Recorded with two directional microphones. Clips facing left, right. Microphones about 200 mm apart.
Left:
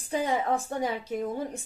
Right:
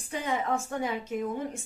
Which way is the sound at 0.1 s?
35° left (ahead or behind).